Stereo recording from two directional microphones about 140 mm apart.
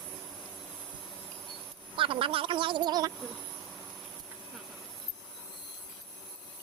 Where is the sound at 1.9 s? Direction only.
40° right (ahead or behind).